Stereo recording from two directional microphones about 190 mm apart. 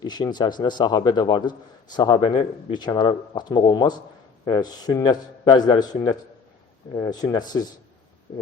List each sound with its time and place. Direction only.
0.0 s a man's voice: 20° left (ahead or behind)